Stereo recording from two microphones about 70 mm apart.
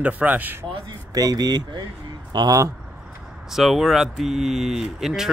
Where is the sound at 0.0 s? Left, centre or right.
Right.